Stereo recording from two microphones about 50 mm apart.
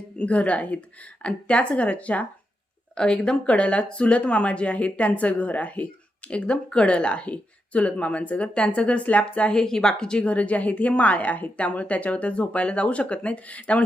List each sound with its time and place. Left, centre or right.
0.2 s speech: left
2.9 s speech: centre
9.6 s speech: centre